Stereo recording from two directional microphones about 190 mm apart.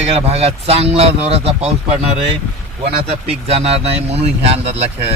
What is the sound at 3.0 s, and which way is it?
A man's voice, 35° right (ahead or behind).